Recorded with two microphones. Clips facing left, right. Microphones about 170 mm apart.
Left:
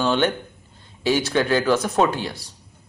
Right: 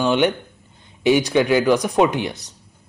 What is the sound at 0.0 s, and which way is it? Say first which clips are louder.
Speech: right 3 dB; 15° right (ahead or behind).